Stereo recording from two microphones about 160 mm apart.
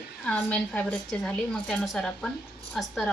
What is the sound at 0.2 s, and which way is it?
A woman's voice, 10° left (ahead or behind).